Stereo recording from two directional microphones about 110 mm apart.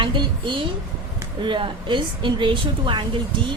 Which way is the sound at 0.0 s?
45° right (ahead or behind).